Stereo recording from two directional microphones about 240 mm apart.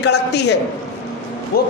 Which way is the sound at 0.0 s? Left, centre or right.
Left.